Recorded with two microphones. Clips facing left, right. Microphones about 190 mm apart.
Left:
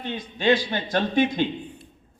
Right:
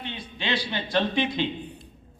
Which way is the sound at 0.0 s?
45° left (ahead or behind).